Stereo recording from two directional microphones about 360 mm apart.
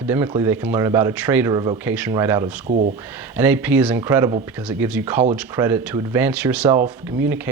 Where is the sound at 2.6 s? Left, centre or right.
Right.